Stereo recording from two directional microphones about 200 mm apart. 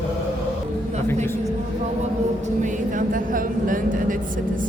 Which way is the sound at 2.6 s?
40° right (ahead or behind).